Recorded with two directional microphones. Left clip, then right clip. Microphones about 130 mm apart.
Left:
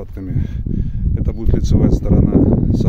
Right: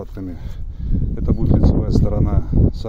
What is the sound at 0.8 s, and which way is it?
Speech, 5° left (ahead or behind).